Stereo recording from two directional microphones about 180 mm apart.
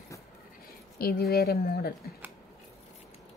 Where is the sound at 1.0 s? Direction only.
55° left (ahead or behind).